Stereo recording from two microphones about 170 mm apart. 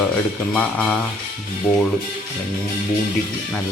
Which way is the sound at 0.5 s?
10° left (ahead or behind).